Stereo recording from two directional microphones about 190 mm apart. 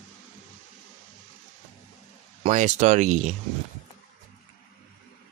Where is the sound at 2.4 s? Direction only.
40° right (ahead or behind).